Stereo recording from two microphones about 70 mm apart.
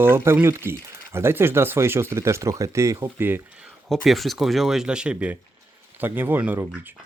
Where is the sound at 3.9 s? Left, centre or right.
Centre.